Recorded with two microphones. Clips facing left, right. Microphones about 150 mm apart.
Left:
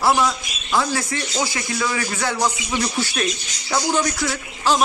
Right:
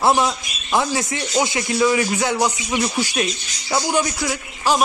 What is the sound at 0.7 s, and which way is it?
Speech, 20° right (ahead or behind).